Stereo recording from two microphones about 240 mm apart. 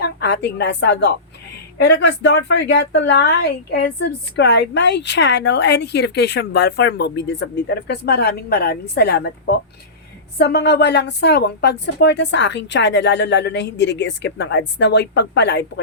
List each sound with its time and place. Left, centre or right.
0.0 s a woman's voice: left